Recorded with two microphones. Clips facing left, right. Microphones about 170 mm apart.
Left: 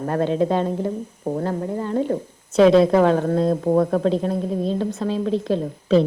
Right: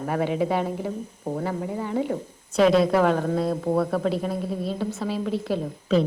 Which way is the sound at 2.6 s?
25° left (ahead or behind).